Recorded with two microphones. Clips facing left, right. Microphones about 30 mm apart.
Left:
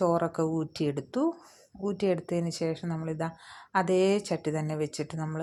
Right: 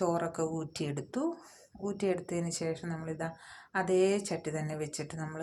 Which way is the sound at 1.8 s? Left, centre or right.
Left.